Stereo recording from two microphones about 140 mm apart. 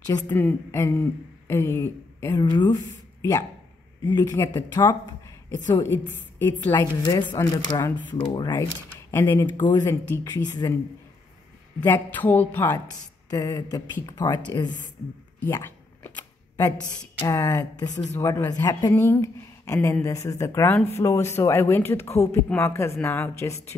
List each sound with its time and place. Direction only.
0.3 s a woman's voice: 15° left (ahead or behind); by 8.6 s 30° left (ahead or behind)
9.1 s speech: 15° left (ahead or behind)
9.6 s a woman's voice: 30° left (ahead or behind)
9.8 s speech: 15° left (ahead or behind)
10.2 s speech: 30° left (ahead or behind)
11.8 s speech: 15° left (ahead or behind); by 14.9 s 30° left (ahead or behind)
15.4 s a sound: 15° left (ahead or behind)
17.3 s speech: 20° left (ahead or behind)